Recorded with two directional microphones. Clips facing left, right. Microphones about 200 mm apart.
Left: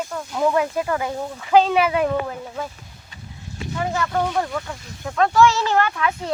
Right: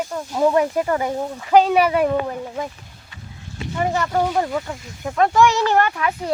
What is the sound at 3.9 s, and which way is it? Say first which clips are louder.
Speech: right 2 dB; 15° right (ahead or behind).